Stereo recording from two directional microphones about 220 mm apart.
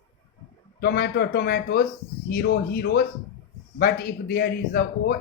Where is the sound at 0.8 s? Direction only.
45° left (ahead or behind).